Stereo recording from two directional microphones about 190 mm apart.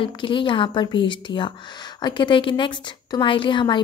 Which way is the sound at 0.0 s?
25° left (ahead or behind).